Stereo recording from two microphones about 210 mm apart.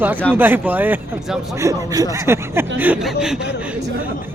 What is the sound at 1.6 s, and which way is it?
A man's voice, 15° right (ahead or behind).